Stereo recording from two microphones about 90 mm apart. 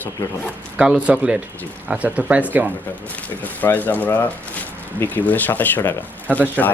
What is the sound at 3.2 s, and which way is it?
Speech, 20° left (ahead or behind).